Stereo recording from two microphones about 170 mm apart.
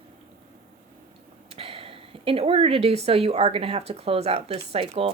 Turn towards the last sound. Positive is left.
turn(degrees=-35)  # may be behind; listen again after turning